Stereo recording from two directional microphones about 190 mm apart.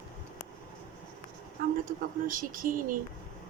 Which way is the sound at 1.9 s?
45° right (ahead or behind).